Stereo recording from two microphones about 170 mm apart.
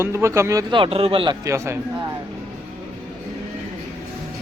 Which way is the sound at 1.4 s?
15° right (ahead or behind).